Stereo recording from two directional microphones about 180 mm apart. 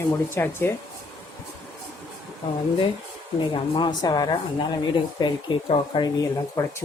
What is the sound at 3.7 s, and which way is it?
Speech, 25° left (ahead or behind).